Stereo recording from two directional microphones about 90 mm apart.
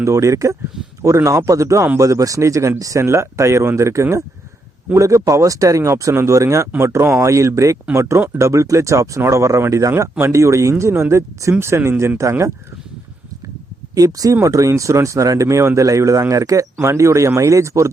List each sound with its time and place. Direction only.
0.0 s speech: 35° right (ahead or behind)
13.9 s speech: 40° right (ahead or behind)